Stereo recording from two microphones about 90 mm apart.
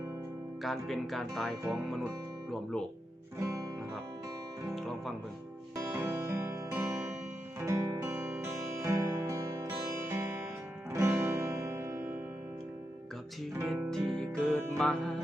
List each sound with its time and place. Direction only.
0.6 s speech: centre (ahead or behind)
4.7 s music: centre (ahead or behind)
5.9 s music: 30° right (ahead or behind)
8.4 s music: 30° right (ahead or behind)
13.9 s music: centre (ahead or behind)